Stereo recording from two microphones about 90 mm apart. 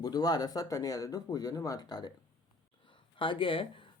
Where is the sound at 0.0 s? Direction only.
50° left (ahead or behind).